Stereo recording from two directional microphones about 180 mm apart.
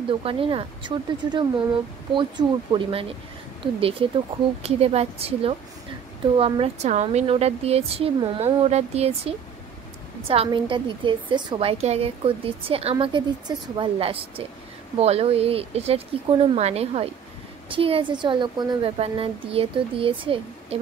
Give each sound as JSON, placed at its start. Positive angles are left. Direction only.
{"t": 0.2, "sound": "a woman's voice", "side_deg": -30}